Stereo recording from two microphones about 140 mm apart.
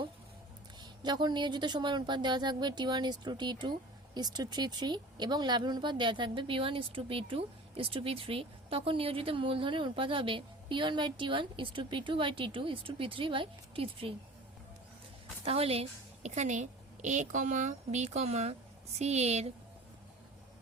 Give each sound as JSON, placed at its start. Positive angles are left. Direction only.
{"t": 0.8, "sound": "speech", "side_deg": -30}
{"t": 15.4, "sound": "a woman's voice", "side_deg": -45}